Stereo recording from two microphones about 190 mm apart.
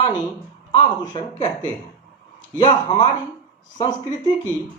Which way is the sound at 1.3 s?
35° left (ahead or behind).